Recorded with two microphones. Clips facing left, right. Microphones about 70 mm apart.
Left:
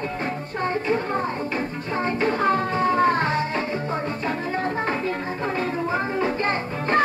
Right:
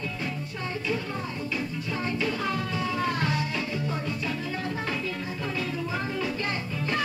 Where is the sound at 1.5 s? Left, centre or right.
Left.